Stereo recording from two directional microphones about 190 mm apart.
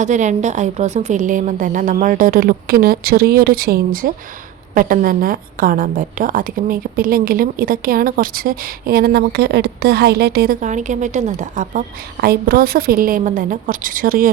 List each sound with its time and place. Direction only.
0.0 s a woman's voice: 40° right (ahead or behind)
12.2 s a woman's voice: 55° right (ahead or behind)